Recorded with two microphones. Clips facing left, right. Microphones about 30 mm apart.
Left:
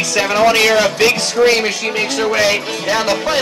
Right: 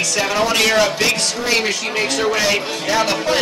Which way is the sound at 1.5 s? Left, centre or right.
Centre.